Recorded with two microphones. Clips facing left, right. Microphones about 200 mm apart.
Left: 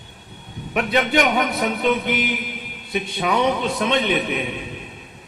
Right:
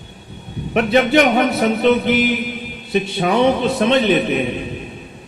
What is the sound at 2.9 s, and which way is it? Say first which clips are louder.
A man's voice: right 5 dB; 25° right (ahead or behind).